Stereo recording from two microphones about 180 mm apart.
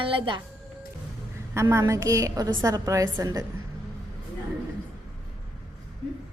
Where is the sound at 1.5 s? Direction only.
15° right (ahead or behind).